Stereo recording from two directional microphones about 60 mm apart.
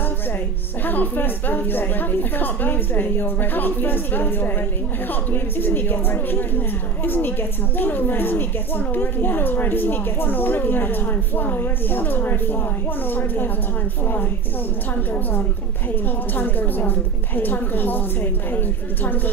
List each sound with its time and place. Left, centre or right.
0.8 s speech: left
16.3 s speech: left